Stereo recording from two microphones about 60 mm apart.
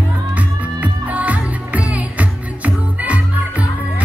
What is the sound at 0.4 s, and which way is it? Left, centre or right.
Music, right.